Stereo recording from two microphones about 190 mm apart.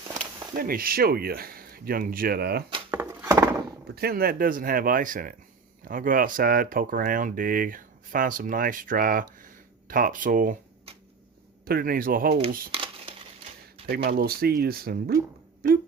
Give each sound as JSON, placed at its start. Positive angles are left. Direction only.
{"t": 0.5, "sound": "speech", "side_deg": -50}
{"t": 2.9, "sound": "a sound", "side_deg": -10}
{"t": 3.9, "sound": "speech", "side_deg": -55}
{"t": 11.6, "sound": "speech", "side_deg": -50}
{"t": 12.7, "sound": "crumpling", "side_deg": -30}
{"t": 13.8, "sound": "speech", "side_deg": -55}